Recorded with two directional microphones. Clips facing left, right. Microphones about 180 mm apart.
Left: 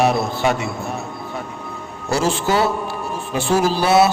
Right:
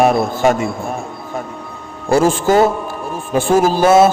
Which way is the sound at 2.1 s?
50° right (ahead or behind).